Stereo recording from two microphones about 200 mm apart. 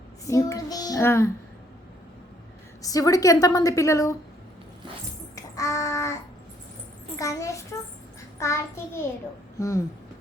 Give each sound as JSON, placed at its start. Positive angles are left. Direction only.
{"t": 0.3, "sound": "child singing", "side_deg": 15}
{"t": 2.8, "sound": "a woman's voice", "side_deg": 15}
{"t": 5.3, "sound": "child singing", "side_deg": 15}
{"t": 7.2, "sound": "a sound", "side_deg": 15}
{"t": 8.4, "sound": "a woman's voice", "side_deg": 15}